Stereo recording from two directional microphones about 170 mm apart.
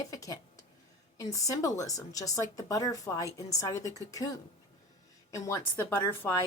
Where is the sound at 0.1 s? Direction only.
20° left (ahead or behind).